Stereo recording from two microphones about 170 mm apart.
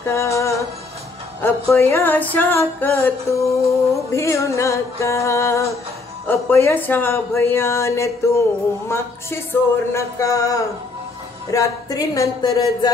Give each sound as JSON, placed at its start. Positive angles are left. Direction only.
{"t": 0.1, "sound": "music", "side_deg": 15}
{"t": 1.4, "sound": "speech", "side_deg": 10}